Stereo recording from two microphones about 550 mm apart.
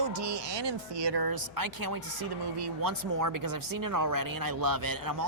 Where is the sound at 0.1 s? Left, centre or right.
Right.